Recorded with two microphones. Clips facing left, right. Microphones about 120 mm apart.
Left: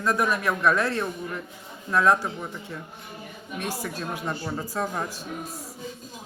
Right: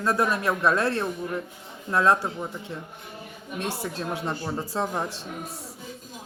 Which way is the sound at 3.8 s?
25° right (ahead or behind).